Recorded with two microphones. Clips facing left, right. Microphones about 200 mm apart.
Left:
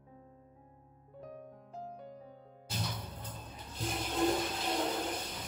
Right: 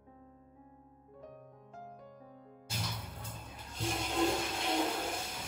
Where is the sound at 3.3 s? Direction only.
10° right (ahead or behind).